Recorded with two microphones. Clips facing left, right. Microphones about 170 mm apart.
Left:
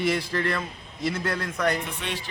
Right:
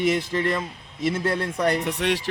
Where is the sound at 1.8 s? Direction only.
75° right (ahead or behind).